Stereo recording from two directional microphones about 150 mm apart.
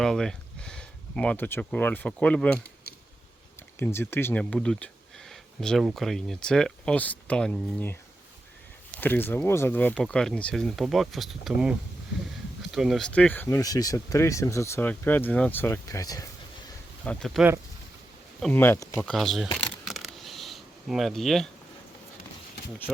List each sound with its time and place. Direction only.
0.0 s speech: 5° left (ahead or behind)
3.8 s speech: 15° left (ahead or behind)
9.0 s speech: 15° left (ahead or behind)
17.0 s speech: 5° left (ahead or behind)
18.5 s speech: 15° left (ahead or behind)
19.1 s speech: centre (ahead or behind)
19.5 s camera: centre (ahead or behind)